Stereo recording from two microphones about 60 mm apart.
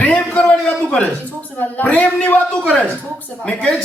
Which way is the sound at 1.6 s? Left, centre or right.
Left.